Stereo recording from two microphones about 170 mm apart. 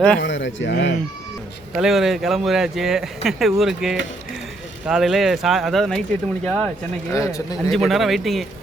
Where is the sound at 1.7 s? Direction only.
Centre (ahead or behind).